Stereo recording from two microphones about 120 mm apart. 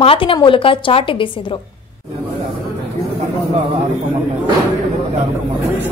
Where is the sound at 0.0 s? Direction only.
50° left (ahead or behind).